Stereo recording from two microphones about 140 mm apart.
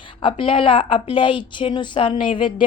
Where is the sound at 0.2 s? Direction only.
40° left (ahead or behind).